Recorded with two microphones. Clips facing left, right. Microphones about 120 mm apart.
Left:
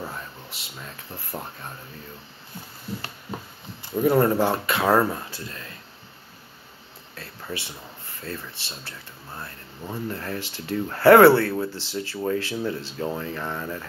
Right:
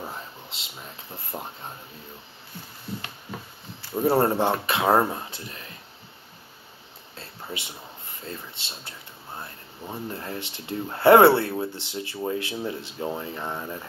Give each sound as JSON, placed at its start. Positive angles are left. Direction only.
{"t": 0.1, "sound": "speech", "side_deg": -25}
{"t": 4.0, "sound": "speech", "side_deg": -30}
{"t": 7.2, "sound": "a sound", "side_deg": -20}
{"t": 8.2, "sound": "speech", "side_deg": -20}